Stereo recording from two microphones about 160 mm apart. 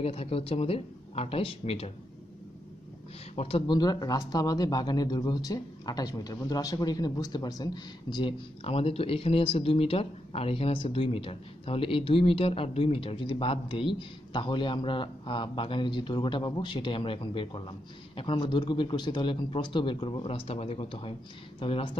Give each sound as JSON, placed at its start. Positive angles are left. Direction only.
{"t": 0.0, "sound": "speech", "side_deg": 40}
{"t": 3.3, "sound": "speech", "side_deg": 35}